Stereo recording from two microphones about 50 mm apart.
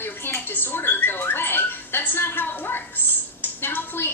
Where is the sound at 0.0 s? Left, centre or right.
Left.